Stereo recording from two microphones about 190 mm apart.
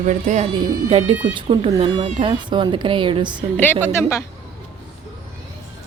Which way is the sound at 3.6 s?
10° left (ahead or behind).